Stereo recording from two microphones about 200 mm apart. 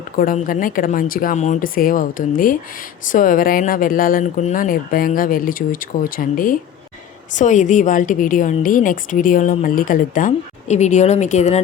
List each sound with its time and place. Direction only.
0.2 s a woman's voice: 45° left (ahead or behind)